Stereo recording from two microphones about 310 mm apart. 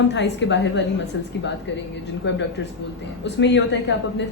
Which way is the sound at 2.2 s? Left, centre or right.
Left.